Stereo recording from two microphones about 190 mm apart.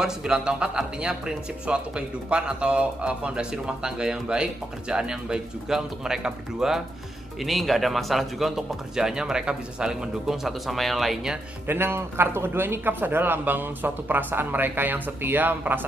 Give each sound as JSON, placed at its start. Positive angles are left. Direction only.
{"t": 0.0, "sound": "speech", "side_deg": -5}
{"t": 11.6, "sound": "speech", "side_deg": -10}